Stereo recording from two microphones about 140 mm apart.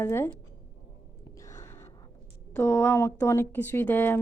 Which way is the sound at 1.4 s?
25° left (ahead or behind).